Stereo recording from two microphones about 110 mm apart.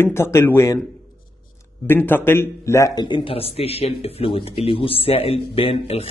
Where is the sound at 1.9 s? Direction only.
20° left (ahead or behind).